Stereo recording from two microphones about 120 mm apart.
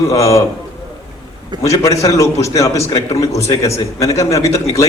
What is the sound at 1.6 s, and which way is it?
A man's voice, 25° left (ahead or behind).